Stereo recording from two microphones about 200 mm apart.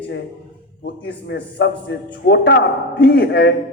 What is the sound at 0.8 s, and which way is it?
A man's voice, 55° left (ahead or behind).